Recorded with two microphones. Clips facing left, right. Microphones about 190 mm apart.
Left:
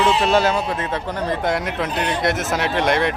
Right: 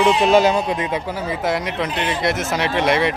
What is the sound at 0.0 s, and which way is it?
A man's voice, 15° right (ahead or behind).